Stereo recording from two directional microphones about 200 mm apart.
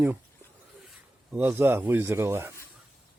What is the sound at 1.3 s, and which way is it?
A man's voice, 10° right (ahead or behind).